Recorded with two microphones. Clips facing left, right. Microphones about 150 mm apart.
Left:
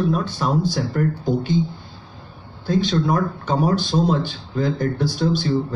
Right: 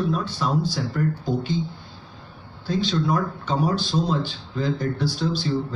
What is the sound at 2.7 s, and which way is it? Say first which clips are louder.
Speech: left 3 dB; 50° left (ahead or behind).